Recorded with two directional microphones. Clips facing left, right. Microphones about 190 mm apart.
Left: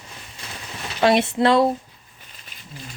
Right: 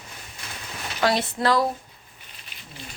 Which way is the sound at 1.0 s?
25° left (ahead or behind).